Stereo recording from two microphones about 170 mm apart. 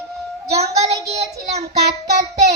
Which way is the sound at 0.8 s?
40° right (ahead or behind).